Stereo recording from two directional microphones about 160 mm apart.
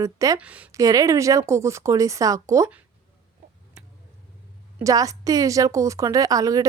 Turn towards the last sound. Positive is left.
turn(degrees=-20)  # may be behind; listen again after turning